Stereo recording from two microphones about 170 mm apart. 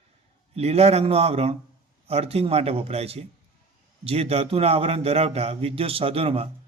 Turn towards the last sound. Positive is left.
turn(degrees=-35)  # may be behind; listen again after turning